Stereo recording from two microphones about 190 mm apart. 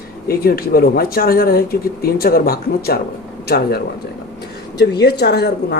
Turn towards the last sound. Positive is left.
turn(degrees=60)  # may be behind; listen again after turning